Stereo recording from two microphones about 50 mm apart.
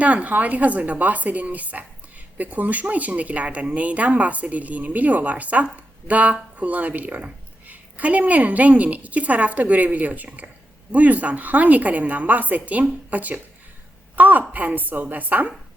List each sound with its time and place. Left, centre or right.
0.0 s speech: right